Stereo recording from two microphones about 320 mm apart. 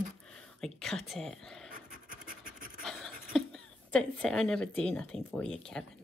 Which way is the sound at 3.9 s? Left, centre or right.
Centre.